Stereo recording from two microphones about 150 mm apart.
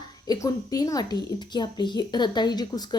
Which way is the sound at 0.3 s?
25° left (ahead or behind).